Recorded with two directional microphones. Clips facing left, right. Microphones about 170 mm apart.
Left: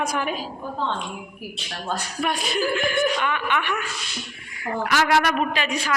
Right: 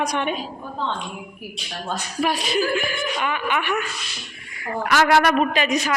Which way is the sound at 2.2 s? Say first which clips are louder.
Right 2 dB; 5° right (ahead or behind).